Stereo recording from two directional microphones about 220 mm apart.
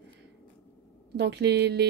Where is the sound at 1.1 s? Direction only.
50° right (ahead or behind).